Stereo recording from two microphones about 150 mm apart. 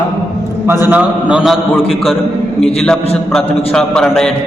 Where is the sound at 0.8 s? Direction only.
10° right (ahead or behind).